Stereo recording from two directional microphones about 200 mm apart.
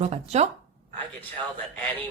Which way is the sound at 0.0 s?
30° right (ahead or behind).